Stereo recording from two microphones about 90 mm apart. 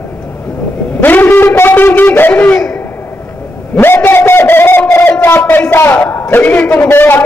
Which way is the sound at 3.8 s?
25° left (ahead or behind).